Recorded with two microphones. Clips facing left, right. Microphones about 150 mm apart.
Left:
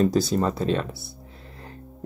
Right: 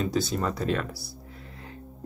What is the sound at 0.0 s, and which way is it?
Speech, 40° left (ahead or behind).